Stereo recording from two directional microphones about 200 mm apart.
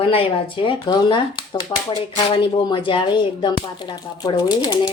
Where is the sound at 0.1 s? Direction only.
25° left (ahead or behind).